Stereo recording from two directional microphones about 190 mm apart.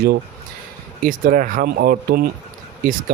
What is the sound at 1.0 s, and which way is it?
A man's voice, 45° right (ahead or behind).